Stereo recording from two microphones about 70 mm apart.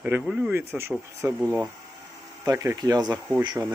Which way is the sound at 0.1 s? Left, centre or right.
Right.